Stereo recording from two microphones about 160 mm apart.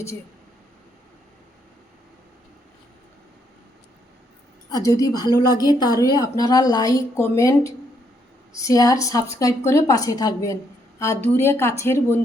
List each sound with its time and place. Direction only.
4.7 s a woman's voice: 20° left (ahead or behind)